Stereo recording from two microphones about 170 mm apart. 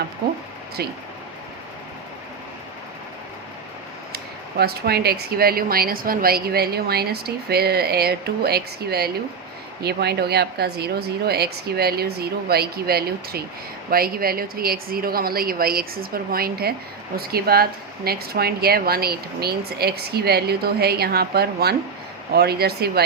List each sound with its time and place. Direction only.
0.8 s speech: 70° right (ahead or behind)
4.1 s a woman's voice: 70° right (ahead or behind)